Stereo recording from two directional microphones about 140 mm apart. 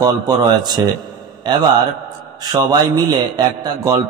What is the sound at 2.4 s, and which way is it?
A man's voice, 30° right (ahead or behind).